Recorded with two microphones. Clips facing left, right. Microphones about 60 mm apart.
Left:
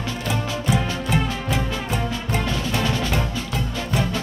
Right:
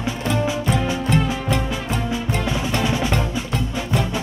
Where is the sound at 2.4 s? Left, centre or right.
Centre.